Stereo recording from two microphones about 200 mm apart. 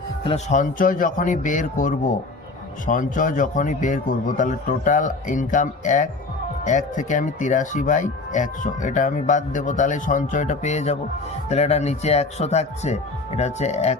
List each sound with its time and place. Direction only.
0.3 s speech: 35° left (ahead or behind)